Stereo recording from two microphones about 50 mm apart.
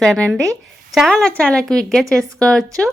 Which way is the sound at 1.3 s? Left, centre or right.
Left.